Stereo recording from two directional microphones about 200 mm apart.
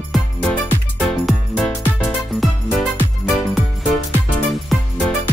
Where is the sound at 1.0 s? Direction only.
Centre (ahead or behind).